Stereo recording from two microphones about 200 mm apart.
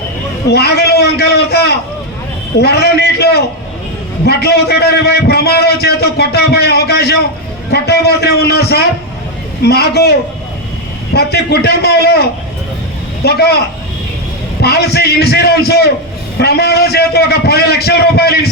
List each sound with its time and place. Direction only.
0.5 s a man's voice: 55° left (ahead or behind)
14.6 s a man's voice: 55° left (ahead or behind)